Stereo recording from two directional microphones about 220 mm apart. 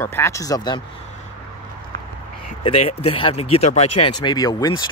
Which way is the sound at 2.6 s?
25° left (ahead or behind).